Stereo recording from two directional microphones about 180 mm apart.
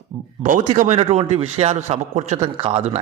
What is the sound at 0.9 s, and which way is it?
A man's voice, 30° right (ahead or behind).